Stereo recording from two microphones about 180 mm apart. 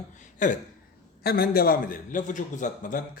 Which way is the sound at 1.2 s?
60° left (ahead or behind).